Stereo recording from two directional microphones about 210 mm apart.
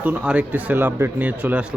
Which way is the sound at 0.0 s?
5° right (ahead or behind).